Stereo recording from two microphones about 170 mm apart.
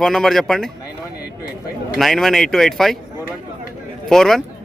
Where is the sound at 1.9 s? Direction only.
Centre (ahead or behind).